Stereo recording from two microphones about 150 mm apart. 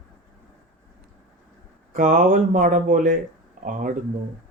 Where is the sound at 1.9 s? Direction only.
60° right (ahead or behind).